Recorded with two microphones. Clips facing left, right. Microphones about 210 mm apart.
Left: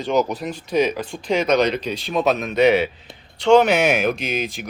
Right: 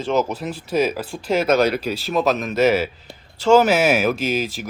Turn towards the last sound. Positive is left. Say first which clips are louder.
# right 3 dB
turn(degrees=0)  # may be behind; listen again after turning